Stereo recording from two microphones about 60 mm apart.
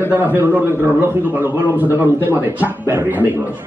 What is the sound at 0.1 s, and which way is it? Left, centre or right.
A man's voice, right.